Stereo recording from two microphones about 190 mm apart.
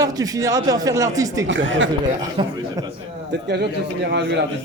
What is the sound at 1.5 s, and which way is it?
Speech, 80° right.